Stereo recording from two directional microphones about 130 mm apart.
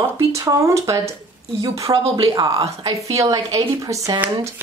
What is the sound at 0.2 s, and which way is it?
A woman's voice, 25° right (ahead or behind).